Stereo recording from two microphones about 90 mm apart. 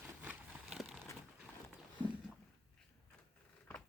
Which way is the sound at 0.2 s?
15° right (ahead or behind).